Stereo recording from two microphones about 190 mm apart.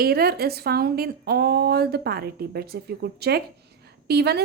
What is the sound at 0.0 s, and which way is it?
Speech, 55° right (ahead or behind).